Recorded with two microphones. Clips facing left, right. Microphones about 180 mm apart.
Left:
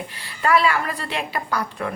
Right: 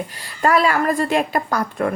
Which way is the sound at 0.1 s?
40° right (ahead or behind).